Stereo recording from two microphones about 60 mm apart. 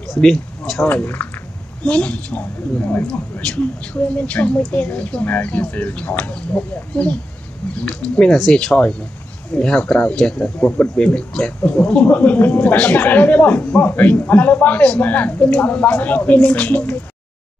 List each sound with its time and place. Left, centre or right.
0.1 s speech: centre
0.8 s speech: left
1.9 s a man's voice: left